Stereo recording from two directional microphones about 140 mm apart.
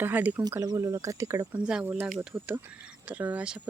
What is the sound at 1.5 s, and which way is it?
Speech, 10° right (ahead or behind).